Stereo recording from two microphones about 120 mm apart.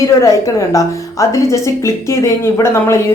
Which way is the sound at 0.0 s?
30° left (ahead or behind).